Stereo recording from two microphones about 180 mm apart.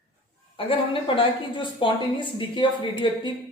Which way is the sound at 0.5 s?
30° left (ahead or behind).